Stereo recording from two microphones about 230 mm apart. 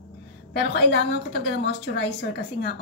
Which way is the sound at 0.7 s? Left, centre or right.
Left.